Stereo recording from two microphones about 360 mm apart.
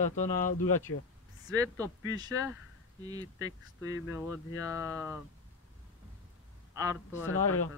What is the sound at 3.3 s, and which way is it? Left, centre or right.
Speech, left.